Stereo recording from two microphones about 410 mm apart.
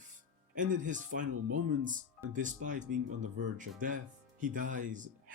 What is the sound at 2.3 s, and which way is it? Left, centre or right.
Speech, centre.